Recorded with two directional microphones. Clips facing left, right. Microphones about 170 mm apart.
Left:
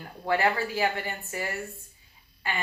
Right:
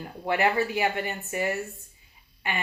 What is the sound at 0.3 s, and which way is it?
Speech, 20° right (ahead or behind).